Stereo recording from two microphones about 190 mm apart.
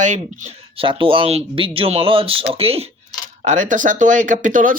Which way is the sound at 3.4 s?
40° right (ahead or behind).